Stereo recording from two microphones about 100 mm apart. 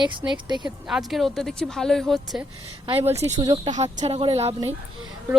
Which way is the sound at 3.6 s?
90° right.